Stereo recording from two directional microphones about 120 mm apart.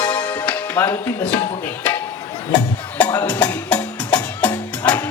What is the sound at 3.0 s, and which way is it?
Music, 15° left (ahead or behind).